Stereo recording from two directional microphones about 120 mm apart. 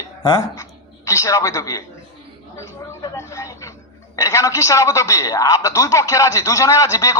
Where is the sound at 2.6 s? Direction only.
25° left (ahead or behind).